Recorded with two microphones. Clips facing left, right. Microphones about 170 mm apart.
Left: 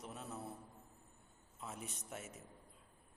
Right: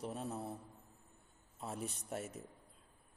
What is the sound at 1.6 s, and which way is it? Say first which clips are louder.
Speech: right 5 dB; 35° right (ahead or behind).